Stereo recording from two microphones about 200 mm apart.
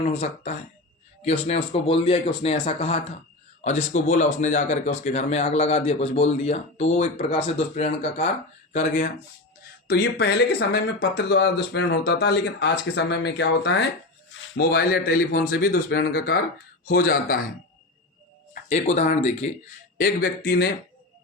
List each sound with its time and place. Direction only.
0.0 s speech: 35° left (ahead or behind)
9.8 s speech: 50° left (ahead or behind)
18.5 s speech: 35° left (ahead or behind)
20.0 s speech: 50° left (ahead or behind)